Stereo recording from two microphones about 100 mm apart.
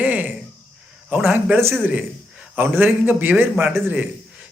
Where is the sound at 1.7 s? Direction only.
10° right (ahead or behind).